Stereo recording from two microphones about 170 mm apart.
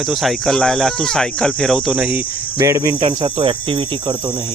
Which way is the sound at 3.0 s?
30° right (ahead or behind).